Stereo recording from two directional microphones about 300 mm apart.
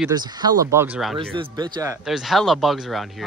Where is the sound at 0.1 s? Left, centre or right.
Centre.